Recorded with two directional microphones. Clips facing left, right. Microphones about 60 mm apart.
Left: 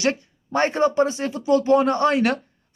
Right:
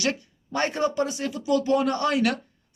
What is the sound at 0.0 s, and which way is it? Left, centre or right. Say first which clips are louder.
Speech: left 4 dB; left.